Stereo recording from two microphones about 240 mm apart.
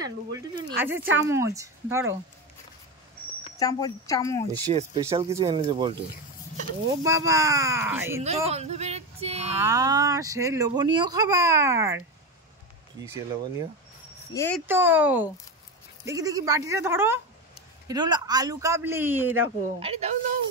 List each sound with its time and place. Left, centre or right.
0.0 s speech: centre
3.5 s speech: centre
4.7 s speech: right; by 8.2 s centre
8.2 s speech: right
9.6 s speech: centre
13.0 s speech: centre
14.3 s speech: centre
14.7 s speech: centre
19.8 s speech: right